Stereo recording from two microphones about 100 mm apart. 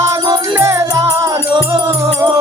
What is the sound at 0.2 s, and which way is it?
Music, 50° right (ahead or behind).